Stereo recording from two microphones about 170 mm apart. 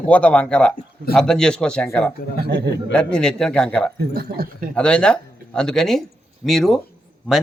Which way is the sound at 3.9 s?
65° right (ahead or behind).